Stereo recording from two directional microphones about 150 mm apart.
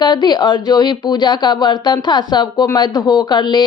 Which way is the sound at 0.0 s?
30° left (ahead or behind).